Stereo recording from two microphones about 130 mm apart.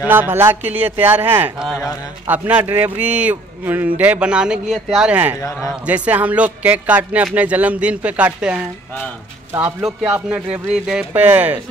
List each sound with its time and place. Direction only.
0.1 s a man's voice: 15° right (ahead or behind)
9.5 s speech: 20° right (ahead or behind)
9.8 s a man's voice: 5° right (ahead or behind)